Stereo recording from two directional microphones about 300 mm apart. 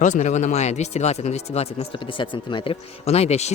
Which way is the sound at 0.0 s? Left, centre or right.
Left.